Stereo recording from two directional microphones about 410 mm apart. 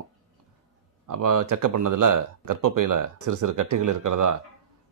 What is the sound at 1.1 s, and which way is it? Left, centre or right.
Speech, right.